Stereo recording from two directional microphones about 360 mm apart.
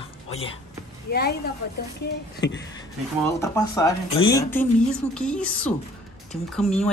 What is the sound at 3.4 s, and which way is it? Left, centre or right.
A woman's voice, centre.